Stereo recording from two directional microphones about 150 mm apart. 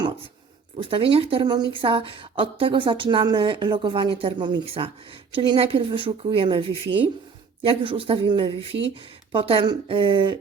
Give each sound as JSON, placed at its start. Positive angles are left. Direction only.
{"t": 0.8, "sound": "a woman's voice", "side_deg": -35}